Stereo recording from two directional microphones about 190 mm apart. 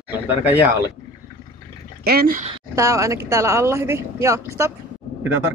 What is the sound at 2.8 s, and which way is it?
Speech, 15° right (ahead or behind).